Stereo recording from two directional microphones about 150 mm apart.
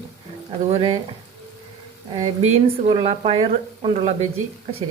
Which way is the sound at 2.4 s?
45° right (ahead or behind).